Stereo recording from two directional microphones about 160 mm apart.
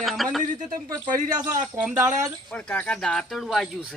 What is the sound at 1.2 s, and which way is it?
Speech, 25° right (ahead or behind).